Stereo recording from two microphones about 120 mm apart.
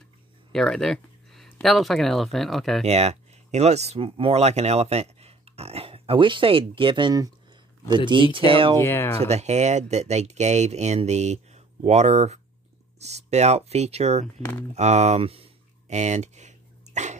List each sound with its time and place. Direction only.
0.5 s speech: 5° left (ahead or behind)
2.8 s speech: 65° right (ahead or behind)
8.7 s speech: 20° left (ahead or behind)
9.2 s speech: 65° right (ahead or behind)
14.7 s a sound: 70° right (ahead or behind)